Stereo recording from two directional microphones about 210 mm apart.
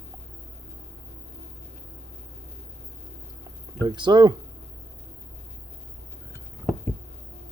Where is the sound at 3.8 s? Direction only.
20° right (ahead or behind).